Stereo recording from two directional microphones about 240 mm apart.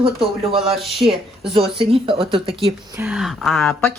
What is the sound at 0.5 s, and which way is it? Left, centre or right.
Speech, centre.